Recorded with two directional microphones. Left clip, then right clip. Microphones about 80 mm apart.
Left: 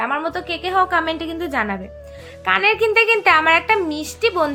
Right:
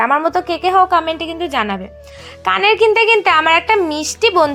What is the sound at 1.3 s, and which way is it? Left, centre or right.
Speech, centre.